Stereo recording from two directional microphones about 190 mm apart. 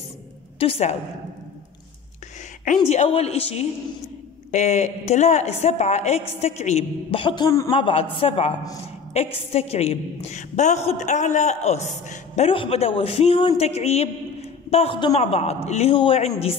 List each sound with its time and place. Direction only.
0.6 s a woman's voice: 30° left (ahead or behind)
2.9 s a woman's voice: 35° left (ahead or behind); by 7.7 s 20° left (ahead or behind)
7.7 s a woman's voice: 30° left (ahead or behind)